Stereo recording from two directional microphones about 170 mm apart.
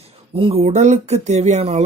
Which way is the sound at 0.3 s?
35° right (ahead or behind).